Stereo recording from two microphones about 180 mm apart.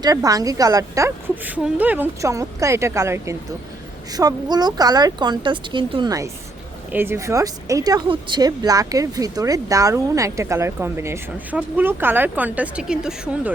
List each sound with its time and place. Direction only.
0.0 s speech: 20° right (ahead or behind); by 13.5 s 5° right (ahead or behind)